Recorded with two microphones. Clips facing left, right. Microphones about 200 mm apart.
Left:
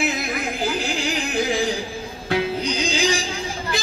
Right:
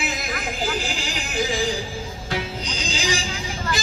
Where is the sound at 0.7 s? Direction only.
60° left (ahead or behind).